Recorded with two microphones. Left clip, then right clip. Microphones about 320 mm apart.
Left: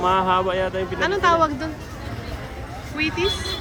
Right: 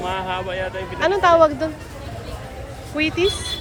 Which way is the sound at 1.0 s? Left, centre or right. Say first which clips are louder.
Right 4 dB; centre.